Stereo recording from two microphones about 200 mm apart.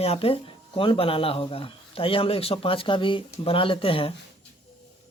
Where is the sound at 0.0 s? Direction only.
30° left (ahead or behind).